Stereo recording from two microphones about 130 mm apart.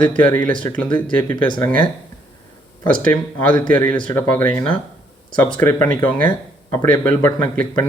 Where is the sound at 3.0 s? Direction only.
10° left (ahead or behind).